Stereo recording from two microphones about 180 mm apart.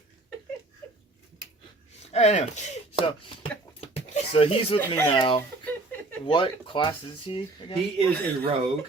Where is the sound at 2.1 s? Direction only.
35° left (ahead or behind).